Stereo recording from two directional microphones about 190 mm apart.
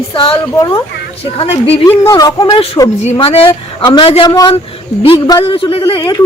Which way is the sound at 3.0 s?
35° left (ahead or behind).